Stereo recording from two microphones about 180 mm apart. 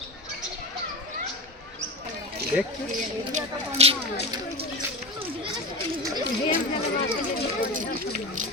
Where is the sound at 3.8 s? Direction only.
35° right (ahead or behind).